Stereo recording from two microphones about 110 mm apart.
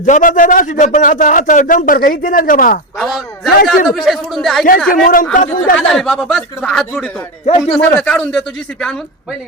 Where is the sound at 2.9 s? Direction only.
Centre (ahead or behind).